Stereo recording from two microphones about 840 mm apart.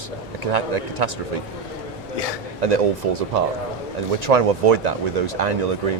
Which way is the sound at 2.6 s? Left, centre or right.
Right.